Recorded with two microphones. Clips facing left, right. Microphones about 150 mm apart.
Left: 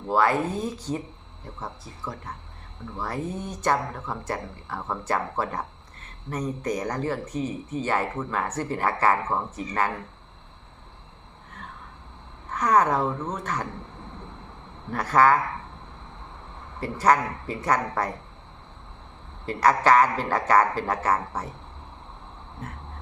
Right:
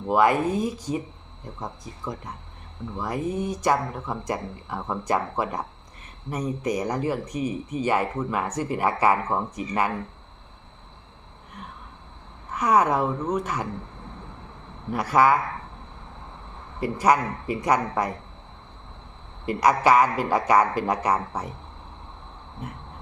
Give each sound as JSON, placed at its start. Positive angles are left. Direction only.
{"t": 0.1, "sound": "speech", "side_deg": -15}
{"t": 12.5, "sound": "speech", "side_deg": -10}
{"t": 14.9, "sound": "speech", "side_deg": -10}
{"t": 16.8, "sound": "speech", "side_deg": -10}
{"t": 19.5, "sound": "speech", "side_deg": -15}